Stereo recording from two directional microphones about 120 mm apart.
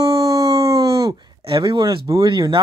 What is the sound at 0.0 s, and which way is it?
Dog, 30° right (ahead or behind).